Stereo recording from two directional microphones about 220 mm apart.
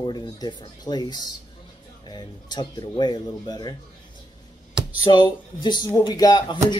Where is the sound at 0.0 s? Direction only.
20° left (ahead or behind).